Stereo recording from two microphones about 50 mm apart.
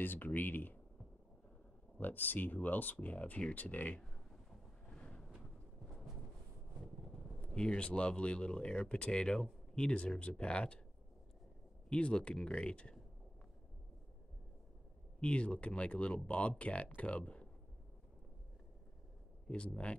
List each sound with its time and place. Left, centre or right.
0.0 s speech: left
2.0 s speech: left
4.8 s vehicle: centre
7.5 s speech: centre
11.9 s speech: left
15.1 s speech: left
19.4 s speech: left